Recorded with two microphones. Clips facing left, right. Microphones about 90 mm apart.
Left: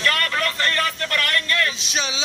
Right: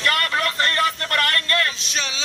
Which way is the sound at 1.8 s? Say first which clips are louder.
Left 2 dB; 10° left (ahead or behind).